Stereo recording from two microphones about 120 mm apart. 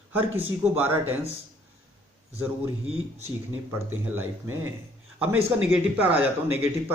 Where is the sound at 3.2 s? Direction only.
20° right (ahead or behind).